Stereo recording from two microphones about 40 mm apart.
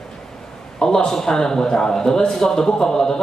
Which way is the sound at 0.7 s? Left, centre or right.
Centre.